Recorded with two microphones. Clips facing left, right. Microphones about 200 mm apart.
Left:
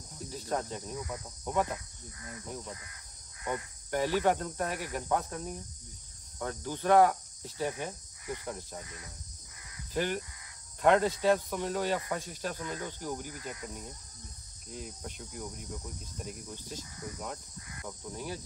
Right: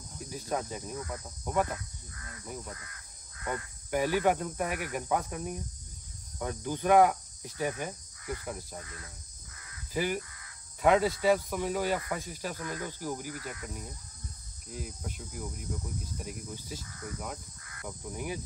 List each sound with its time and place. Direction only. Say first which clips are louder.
0.3 s cricket: even; 10° right (ahead or behind)
0.9 s speech: even; 15° left (ahead or behind)
1.4 s cricket: right 1 dB; 5° right (ahead or behind)
1.7 s speech: even; 20° left (ahead or behind)
2.4 s cricket: right 1 dB; 5° right (ahead or behind)
2.7 s crow: even; 20° left (ahead or behind)
3.9 s cricket: right 1 dB; 10° right (ahead or behind)
8.7 s speech: even; 15° left (ahead or behind)
9.9 s cricket: right 1 dB; 10° right (ahead or behind)
13.3 s cricket: right 1 dB; 20° left (ahead or behind)
14.7 s speech: right 2 dB; 5° right (ahead or behind)
17.8 s cricket: right 2 dB; 15° right (ahead or behind)